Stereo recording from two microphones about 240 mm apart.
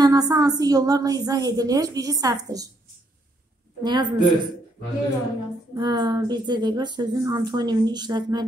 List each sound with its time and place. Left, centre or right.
0.0 s speech: centre
3.8 s a woman's voice: centre
5.8 s speech: centre